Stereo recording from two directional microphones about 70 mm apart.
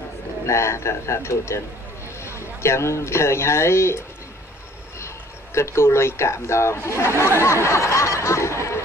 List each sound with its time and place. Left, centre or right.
0.5 s a man's voice: left